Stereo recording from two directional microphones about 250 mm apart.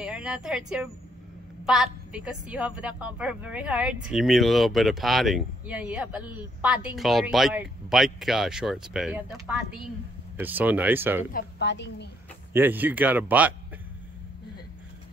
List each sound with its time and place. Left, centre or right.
0.0 s a woman's voice: centre
11.3 s a woman's voice: left
12.5 s speech: centre